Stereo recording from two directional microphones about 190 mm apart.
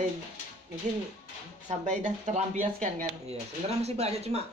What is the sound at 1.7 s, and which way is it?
Speech, 40° right (ahead or behind).